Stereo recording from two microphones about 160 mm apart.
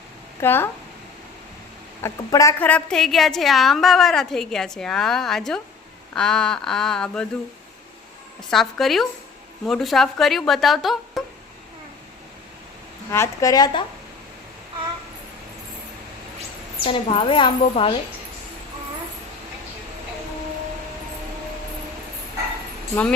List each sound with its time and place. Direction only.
0.3 s speech: 15° left (ahead or behind)
2.0 s a woman's voice: 20° left (ahead or behind)
8.4 s a woman's voice: centre (ahead or behind)
13.1 s speech: 15° left (ahead or behind)
16.8 s a woman's voice: 35° left (ahead or behind)